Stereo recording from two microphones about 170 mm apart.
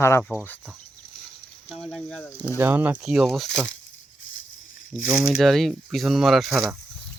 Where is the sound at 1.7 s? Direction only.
Centre (ahead or behind).